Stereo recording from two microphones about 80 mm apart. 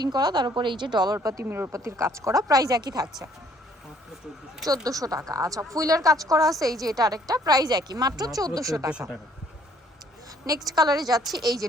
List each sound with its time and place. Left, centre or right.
0.0 s a woman's voice: right
1.5 s a woman's voice: right
4.6 s a woman's voice: right
10.8 s a woman's voice: right